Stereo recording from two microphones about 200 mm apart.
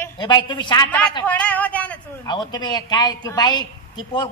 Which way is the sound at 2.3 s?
20° left (ahead or behind).